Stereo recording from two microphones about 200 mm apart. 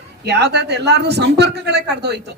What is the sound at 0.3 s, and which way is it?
A woman's voice, 60° right (ahead or behind).